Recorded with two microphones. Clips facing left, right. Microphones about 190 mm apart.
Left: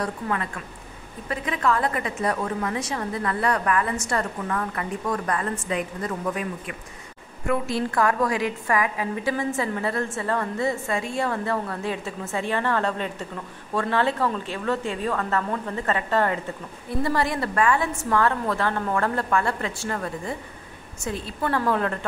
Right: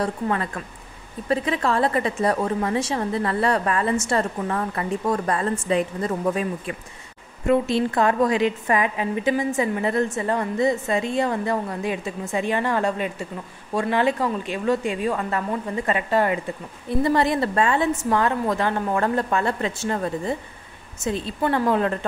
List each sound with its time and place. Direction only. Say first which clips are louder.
0.0 s a woman's voice: right 3 dB; 30° right (ahead or behind)
7.4 s a woman's voice: right 5 dB; 25° right (ahead or behind)